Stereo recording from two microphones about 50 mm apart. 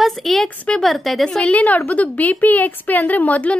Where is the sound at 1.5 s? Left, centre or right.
Left.